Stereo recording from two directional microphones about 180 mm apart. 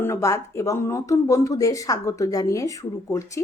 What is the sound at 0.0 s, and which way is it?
Speech, 15° left (ahead or behind).